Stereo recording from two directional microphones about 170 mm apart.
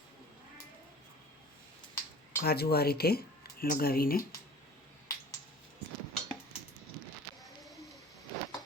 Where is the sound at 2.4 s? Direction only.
65° left (ahead or behind).